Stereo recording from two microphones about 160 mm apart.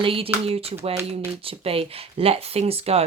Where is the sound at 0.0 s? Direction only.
35° right (ahead or behind).